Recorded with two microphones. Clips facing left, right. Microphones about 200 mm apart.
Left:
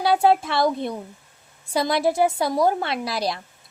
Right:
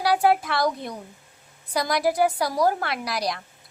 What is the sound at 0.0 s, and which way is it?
A woman's voice, 25° left (ahead or behind).